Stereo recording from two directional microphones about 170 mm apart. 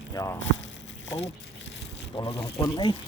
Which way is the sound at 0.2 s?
20° left (ahead or behind).